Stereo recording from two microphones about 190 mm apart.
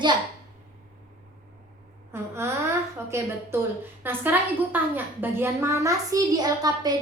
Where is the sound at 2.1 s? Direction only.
15° right (ahead or behind).